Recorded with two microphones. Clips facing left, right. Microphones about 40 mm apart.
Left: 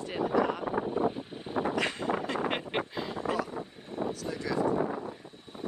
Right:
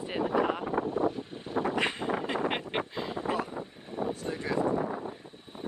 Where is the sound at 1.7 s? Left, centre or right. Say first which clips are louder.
Even; right.